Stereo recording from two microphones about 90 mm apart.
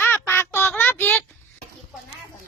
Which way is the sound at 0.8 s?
25° left (ahead or behind).